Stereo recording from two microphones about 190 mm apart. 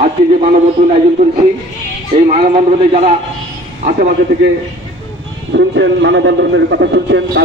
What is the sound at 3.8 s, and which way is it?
Speech, 40° right (ahead or behind).